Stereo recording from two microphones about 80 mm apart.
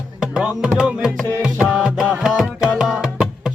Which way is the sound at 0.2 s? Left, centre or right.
Centre.